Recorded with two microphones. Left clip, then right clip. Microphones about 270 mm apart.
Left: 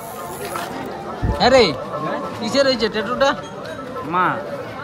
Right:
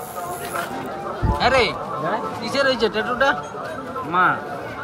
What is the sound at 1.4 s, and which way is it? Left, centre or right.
A man's voice, centre.